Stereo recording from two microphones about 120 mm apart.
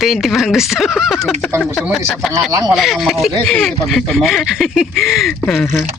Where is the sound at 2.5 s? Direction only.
30° right (ahead or behind).